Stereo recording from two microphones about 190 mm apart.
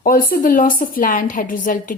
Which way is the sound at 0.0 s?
50° left (ahead or behind).